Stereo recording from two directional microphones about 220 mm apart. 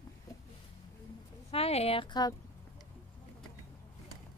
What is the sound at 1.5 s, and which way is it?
Speech, 25° left (ahead or behind).